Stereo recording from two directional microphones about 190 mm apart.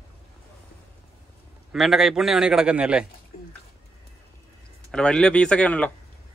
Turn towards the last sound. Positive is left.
turn(degrees=5)  # may be behind; listen again after turning